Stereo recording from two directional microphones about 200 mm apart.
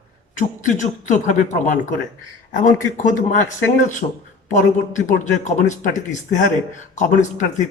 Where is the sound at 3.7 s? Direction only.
40° left (ahead or behind).